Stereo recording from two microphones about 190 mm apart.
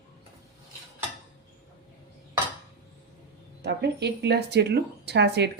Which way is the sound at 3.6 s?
60° right (ahead or behind).